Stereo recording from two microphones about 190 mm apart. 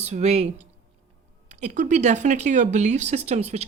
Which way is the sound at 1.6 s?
40° right (ahead or behind).